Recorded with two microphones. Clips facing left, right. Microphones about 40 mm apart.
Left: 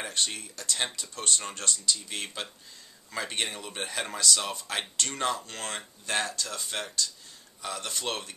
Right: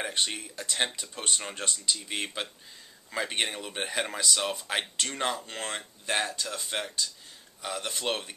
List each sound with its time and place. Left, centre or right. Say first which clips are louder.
0.0 s speech: right 1 dB; centre